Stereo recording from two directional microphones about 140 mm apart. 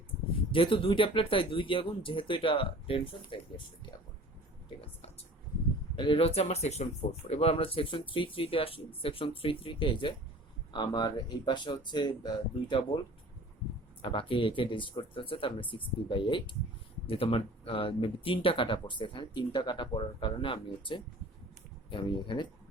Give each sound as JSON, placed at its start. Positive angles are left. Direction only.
{"t": 0.5, "sound": "speech", "side_deg": 40}
{"t": 6.0, "sound": "speech", "side_deg": 40}
{"t": 14.0, "sound": "speech", "side_deg": 40}